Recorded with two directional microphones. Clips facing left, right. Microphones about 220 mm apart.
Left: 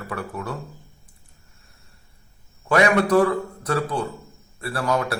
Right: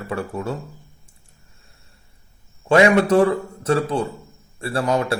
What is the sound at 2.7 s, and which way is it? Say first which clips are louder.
Speech: right 4 dB; 25° right (ahead or behind).